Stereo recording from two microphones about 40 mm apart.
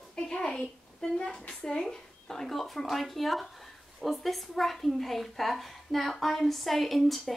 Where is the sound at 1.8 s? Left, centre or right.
Centre.